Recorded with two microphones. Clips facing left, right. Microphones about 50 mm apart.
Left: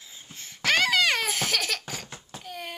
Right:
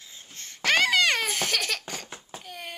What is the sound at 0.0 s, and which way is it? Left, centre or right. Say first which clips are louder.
Laughter: even; centre.